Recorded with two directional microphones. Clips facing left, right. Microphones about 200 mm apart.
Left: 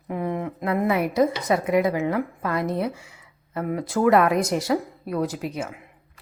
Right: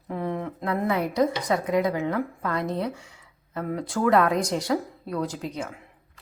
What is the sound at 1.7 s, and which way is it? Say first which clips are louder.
Speech: left 2 dB; 10° left (ahead or behind).